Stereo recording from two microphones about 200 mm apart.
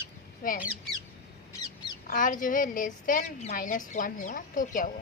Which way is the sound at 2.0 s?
40° left (ahead or behind).